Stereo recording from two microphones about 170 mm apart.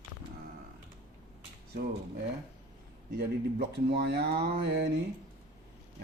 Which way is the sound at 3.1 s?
70° right (ahead or behind).